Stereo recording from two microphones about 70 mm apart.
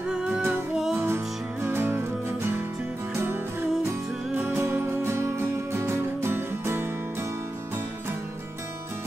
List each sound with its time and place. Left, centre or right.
0.0 s music: centre
0.9 s music: right
4.4 s music: right